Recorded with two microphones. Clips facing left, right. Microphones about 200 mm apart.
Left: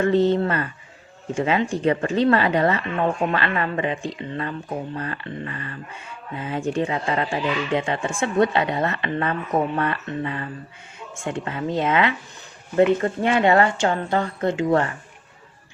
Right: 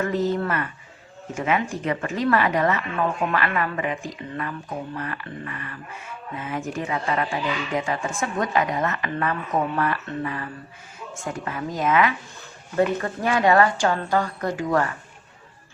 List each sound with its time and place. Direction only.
0.0 s speech: 30° left (ahead or behind)